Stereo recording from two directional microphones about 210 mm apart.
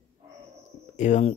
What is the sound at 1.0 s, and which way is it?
Speech, 35° left (ahead or behind).